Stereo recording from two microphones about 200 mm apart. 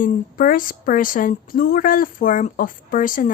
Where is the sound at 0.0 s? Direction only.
45° left (ahead or behind).